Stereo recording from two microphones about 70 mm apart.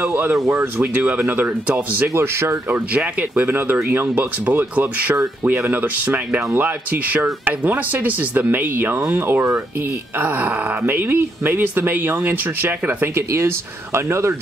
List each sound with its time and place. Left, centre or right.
0.0 s speech: right
2.1 s speech: right
3.2 s speech: right